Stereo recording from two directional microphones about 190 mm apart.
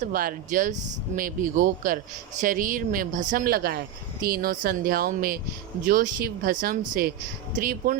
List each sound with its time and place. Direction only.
0.0 s speech: 45° right (ahead or behind)